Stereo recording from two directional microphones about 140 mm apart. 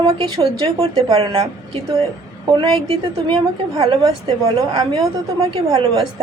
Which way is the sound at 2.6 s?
35° right (ahead or behind).